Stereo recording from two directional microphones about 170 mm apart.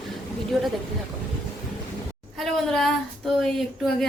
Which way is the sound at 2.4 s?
Centre (ahead or behind).